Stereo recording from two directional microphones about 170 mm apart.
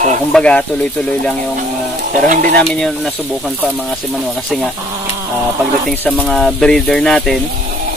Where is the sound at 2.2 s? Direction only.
50° right (ahead or behind).